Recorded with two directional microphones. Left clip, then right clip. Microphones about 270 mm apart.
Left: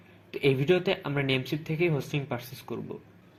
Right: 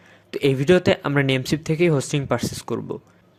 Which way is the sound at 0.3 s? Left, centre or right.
Right.